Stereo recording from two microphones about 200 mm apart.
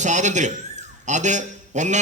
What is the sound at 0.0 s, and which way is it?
A man's voice, 35° right (ahead or behind).